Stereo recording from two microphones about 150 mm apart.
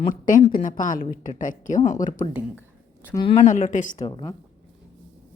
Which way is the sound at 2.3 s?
10° right (ahead or behind).